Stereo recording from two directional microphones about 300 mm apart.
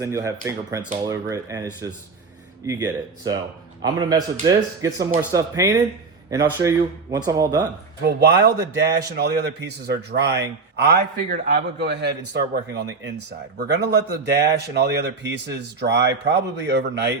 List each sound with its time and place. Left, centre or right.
0.0 s speech: centre
2.6 s speech: centre
8.0 s a man's voice: right